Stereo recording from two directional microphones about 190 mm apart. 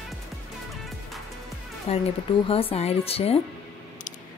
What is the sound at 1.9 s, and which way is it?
Speech, 30° left (ahead or behind).